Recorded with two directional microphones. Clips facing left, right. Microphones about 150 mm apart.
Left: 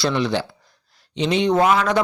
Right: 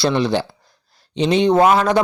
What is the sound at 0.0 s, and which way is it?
A man's voice, 30° right (ahead or behind).